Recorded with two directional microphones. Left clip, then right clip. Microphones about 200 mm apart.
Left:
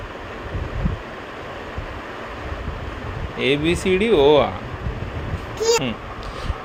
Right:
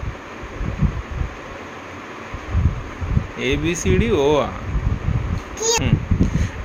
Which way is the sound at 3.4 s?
5° right (ahead or behind).